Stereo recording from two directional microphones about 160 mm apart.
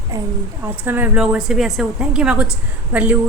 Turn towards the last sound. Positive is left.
turn(degrees=-10)  # may be behind; listen again after turning